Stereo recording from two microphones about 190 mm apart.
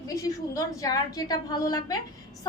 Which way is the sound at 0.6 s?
20° left (ahead or behind).